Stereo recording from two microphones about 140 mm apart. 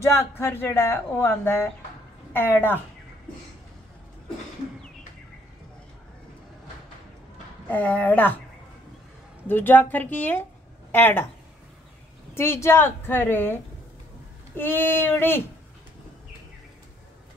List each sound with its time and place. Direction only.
0.0 s speech: 20° left (ahead or behind)
7.6 s speech: 10° left (ahead or behind)
9.5 s a woman's voice: 15° left (ahead or behind)
12.4 s speech: 20° left (ahead or behind)
14.6 s speech: 15° left (ahead or behind)